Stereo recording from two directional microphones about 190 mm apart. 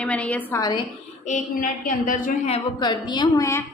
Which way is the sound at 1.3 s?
45° left (ahead or behind).